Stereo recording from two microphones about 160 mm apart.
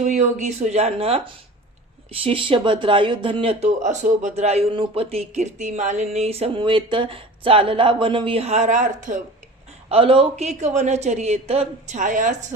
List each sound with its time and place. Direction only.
0.0 s a woman's voice: 50° right (ahead or behind)
9.9 s a woman's voice: 35° right (ahead or behind)